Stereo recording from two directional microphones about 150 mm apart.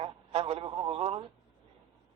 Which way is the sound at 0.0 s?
45° right (ahead or behind).